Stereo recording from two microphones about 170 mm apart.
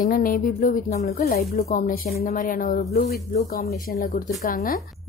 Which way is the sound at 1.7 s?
60° left (ahead or behind).